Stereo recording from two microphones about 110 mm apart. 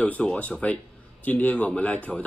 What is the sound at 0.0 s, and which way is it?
Speech, 10° left (ahead or behind).